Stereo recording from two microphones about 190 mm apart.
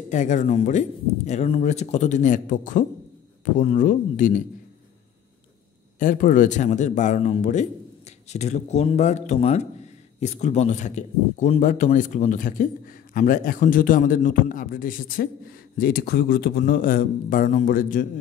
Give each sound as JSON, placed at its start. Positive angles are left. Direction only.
{"t": 0.1, "sound": "speech", "side_deg": 40}
{"t": 5.9, "sound": "speech", "side_deg": 45}